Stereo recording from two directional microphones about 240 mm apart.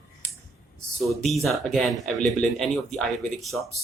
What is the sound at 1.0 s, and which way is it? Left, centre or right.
Speech, centre.